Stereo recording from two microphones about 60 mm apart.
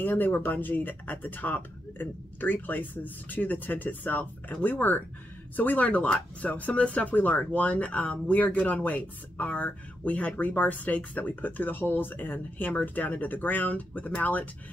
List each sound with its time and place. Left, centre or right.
0.0 s speech: left